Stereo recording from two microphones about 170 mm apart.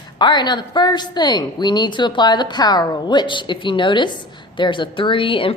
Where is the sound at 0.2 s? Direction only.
25° left (ahead or behind).